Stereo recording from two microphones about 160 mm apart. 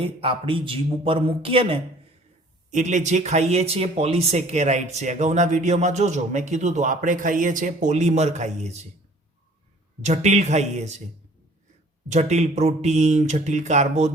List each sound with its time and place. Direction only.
0.0 s a man's voice: 35° right (ahead or behind)
2.6 s speech: 50° right (ahead or behind)
10.0 s speech: 45° right (ahead or behind)
12.1 s speech: 45° right (ahead or behind)